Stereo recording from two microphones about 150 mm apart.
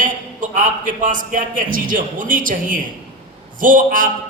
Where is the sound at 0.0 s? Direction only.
60° right (ahead or behind).